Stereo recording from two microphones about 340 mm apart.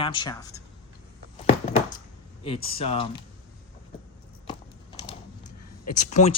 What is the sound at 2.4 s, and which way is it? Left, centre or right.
Speech, centre.